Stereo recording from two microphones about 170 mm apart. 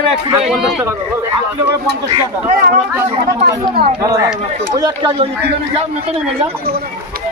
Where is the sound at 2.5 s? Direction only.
60° right (ahead or behind).